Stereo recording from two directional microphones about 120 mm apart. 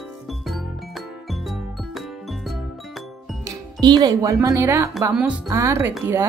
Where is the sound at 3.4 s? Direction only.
35° right (ahead or behind).